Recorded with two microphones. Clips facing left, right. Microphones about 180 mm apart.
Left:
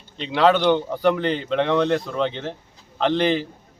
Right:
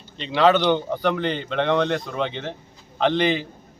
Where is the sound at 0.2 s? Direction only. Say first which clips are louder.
Even; centre (ahead or behind).